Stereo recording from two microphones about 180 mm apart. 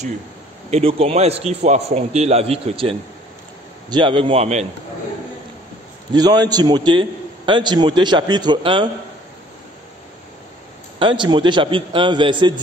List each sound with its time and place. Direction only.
0.7 s a man's voice: 35° right (ahead or behind)
6.1 s a man's voice: 20° right (ahead or behind)
11.0 s a man's voice: 25° right (ahead or behind)